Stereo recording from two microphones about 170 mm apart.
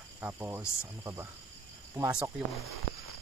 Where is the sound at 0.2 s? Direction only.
10° right (ahead or behind).